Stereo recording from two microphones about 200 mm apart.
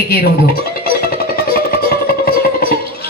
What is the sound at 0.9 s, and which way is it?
Music, 50° left (ahead or behind).